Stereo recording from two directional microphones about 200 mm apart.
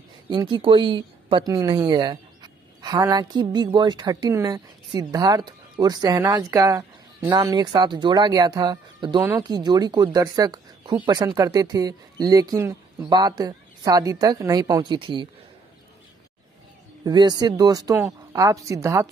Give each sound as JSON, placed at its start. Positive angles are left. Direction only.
{"t": 0.3, "sound": "a man's voice", "side_deg": -25}
{"t": 17.0, "sound": "a man's voice", "side_deg": -20}